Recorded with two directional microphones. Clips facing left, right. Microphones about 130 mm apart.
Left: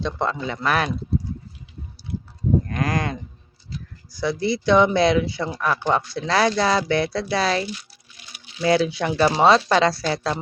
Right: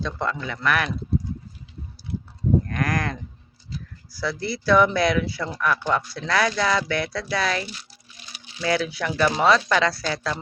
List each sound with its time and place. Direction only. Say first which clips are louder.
0.0 s speech: left 3 dB; 25° left (ahead or behind)
2.6 s speech: left 1 dB; 25° left (ahead or behind)
8.6 s speech: left 5 dB; 30° left (ahead or behind)